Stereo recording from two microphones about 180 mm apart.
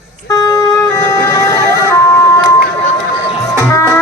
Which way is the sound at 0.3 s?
15° left (ahead or behind).